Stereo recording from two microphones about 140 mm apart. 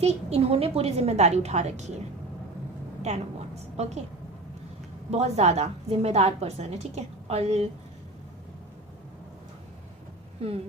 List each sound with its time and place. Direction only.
0.0 s a woman's voice: 50° right (ahead or behind)
3.0 s a woman's voice: 50° right (ahead or behind)
5.1 s a woman's voice: 50° right (ahead or behind)